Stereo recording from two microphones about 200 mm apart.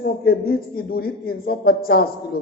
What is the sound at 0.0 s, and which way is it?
A man's voice, 50° left (ahead or behind).